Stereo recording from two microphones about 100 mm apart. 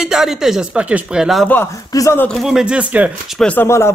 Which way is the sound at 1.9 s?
40° left (ahead or behind).